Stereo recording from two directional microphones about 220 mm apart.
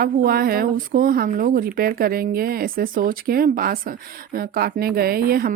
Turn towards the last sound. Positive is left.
turn(degrees=-40)  # may be behind; listen again after turning